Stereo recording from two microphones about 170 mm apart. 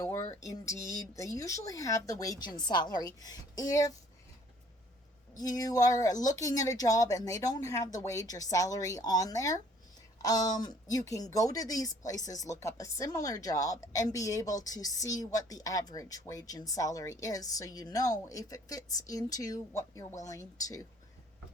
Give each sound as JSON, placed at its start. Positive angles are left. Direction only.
{"t": 0.3, "sound": "a woman's voice", "side_deg": 20}
{"t": 5.4, "sound": "a woman's voice", "side_deg": 20}